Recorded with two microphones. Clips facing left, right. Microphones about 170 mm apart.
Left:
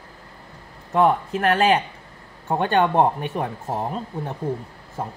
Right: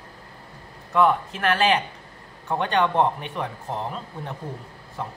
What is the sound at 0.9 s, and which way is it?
A man's voice, 40° left (ahead or behind).